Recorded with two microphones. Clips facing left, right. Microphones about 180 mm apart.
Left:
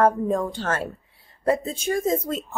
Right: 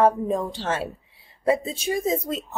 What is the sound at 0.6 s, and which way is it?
Speech, 5° right (ahead or behind).